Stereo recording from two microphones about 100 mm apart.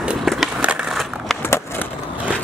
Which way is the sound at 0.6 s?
10° right (ahead or behind).